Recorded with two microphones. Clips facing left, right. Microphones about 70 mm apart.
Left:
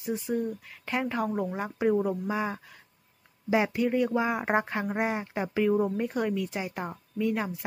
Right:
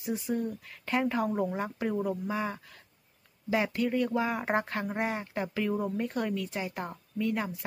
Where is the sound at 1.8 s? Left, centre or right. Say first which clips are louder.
Left 7 dB; centre.